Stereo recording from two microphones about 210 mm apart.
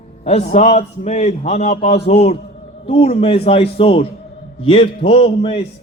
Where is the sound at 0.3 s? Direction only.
30° left (ahead or behind).